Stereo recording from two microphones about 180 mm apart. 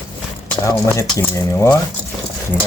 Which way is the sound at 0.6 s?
15° left (ahead or behind).